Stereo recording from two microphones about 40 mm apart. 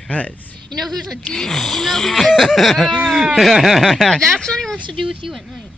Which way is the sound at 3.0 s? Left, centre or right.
Centre.